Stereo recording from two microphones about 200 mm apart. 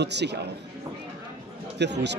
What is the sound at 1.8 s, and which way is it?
Speech, 60° right (ahead or behind).